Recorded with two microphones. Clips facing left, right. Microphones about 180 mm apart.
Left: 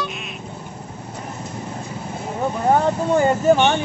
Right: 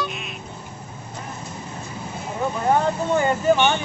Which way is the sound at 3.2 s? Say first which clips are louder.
Left 3 dB; 30° left (ahead or behind).